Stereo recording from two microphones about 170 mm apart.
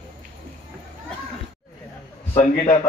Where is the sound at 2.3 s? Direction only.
40° left (ahead or behind).